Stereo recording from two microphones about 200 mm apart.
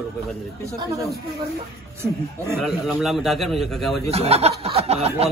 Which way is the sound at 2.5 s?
Centre (ahead or behind).